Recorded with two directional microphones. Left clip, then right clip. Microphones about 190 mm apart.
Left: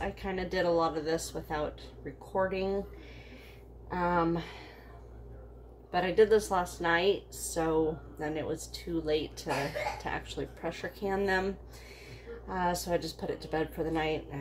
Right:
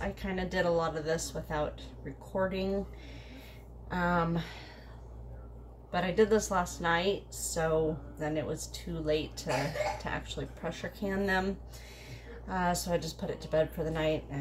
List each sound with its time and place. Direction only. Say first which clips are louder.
0.0 s a woman's voice: left 1 dB; 15° left (ahead or behind)
3.9 s a woman's voice: left 2 dB; 15° left (ahead or behind)
5.9 s a woman's voice: left 2 dB; 15° left (ahead or behind)
12.4 s a woman's voice: even; 15° left (ahead or behind)